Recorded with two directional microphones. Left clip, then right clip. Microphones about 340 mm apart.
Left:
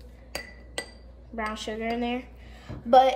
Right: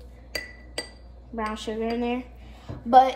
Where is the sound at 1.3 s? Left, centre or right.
Centre.